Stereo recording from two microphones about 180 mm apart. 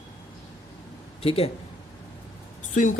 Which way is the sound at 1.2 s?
35° left (ahead or behind).